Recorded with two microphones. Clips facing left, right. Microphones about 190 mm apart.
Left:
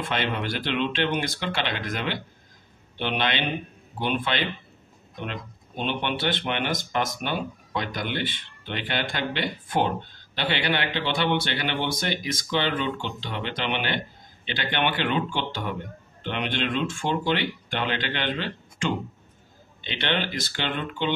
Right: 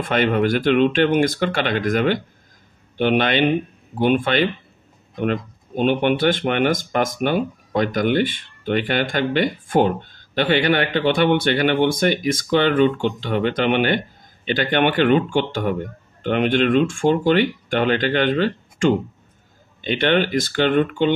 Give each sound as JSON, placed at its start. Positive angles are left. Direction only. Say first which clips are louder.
{"t": 0.1, "sound": "speech", "louder": "right 12 dB", "side_deg": -50}